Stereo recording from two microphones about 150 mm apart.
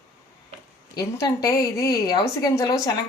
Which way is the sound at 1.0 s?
25° left (ahead or behind).